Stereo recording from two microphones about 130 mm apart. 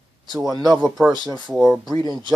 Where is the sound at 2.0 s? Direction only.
35° right (ahead or behind).